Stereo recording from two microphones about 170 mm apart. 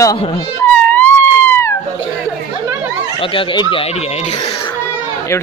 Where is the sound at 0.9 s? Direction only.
10° left (ahead or behind).